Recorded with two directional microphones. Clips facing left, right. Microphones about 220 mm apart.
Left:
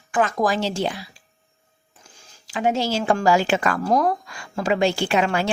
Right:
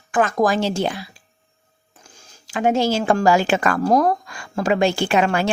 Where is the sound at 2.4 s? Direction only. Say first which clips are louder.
Right 4 dB; 50° right (ahead or behind).